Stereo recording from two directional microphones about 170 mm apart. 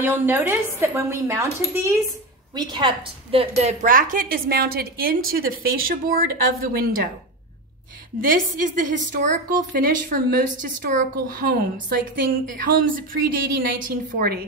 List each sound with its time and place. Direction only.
0.0 s speech: 10° right (ahead or behind)
2.5 s a woman's voice: 25° right (ahead or behind); by 7.1 s 60° right (ahead or behind)
8.5 s a woman's voice: 50° right (ahead or behind)